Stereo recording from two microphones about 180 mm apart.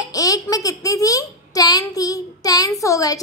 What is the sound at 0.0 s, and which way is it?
A child's voice, 20° left (ahead or behind).